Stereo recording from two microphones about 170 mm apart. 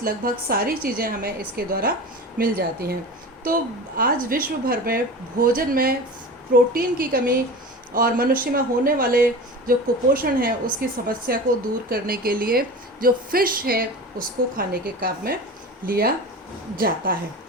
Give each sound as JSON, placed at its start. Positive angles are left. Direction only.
{"t": 0.0, "sound": "a woman's voice", "side_deg": -60}